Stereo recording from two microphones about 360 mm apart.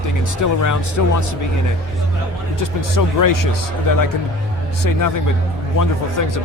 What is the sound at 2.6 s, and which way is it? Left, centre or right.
Speech, left.